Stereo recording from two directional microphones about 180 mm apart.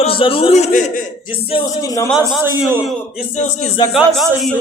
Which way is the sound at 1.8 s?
20° left (ahead or behind).